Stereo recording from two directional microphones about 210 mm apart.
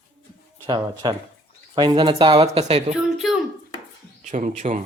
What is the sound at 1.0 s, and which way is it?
Speech, 20° right (ahead or behind).